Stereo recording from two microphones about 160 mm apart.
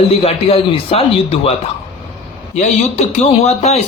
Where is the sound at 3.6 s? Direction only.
40° left (ahead or behind).